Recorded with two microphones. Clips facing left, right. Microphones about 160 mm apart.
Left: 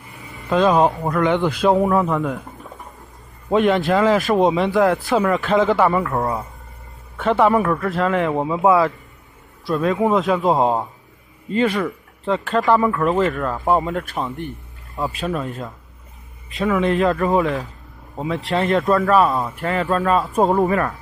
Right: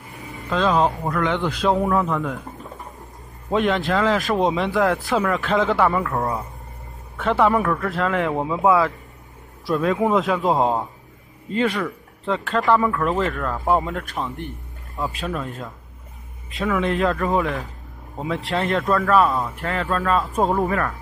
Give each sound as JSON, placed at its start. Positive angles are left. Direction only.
{"t": 0.5, "sound": "speech", "side_deg": 15}
{"t": 3.5, "sound": "speech", "side_deg": 5}
{"t": 7.2, "sound": "speech", "side_deg": 0}